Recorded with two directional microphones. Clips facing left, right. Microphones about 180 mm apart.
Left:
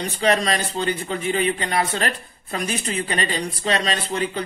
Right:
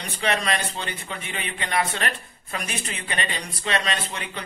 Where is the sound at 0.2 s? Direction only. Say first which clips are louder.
Left 4 dB; 35° left (ahead or behind).